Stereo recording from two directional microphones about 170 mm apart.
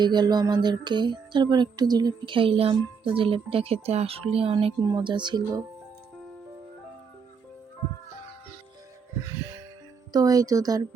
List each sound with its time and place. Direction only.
0.0 s music: 25° right (ahead or behind)
9.2 s music: 20° right (ahead or behind)